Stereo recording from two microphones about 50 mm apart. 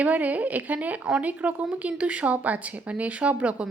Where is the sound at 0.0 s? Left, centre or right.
Right.